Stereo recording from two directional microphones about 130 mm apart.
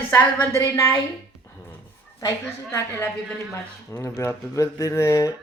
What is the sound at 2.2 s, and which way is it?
Speech, 25° left (ahead or behind).